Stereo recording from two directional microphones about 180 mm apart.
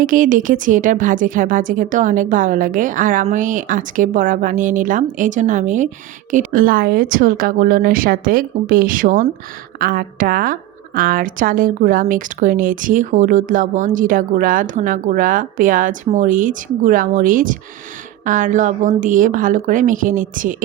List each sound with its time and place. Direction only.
0.0 s a woman's voice: 50° right (ahead or behind)